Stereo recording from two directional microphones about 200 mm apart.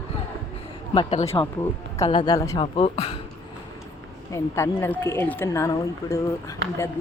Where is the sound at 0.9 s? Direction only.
30° left (ahead or behind).